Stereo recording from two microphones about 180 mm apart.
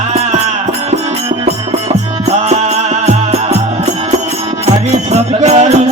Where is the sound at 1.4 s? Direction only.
35° right (ahead or behind).